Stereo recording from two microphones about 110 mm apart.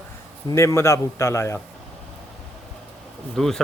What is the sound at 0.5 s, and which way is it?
A man's voice, 25° left (ahead or behind).